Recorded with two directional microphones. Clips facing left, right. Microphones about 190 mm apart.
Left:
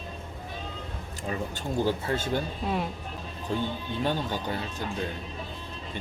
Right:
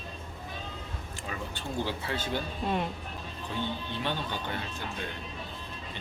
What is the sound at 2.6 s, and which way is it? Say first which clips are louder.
Speech: left 1 dB; 5° left (ahead or behind).